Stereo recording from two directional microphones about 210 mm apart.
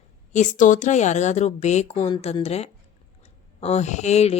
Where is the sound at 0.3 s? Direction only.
35° left (ahead or behind).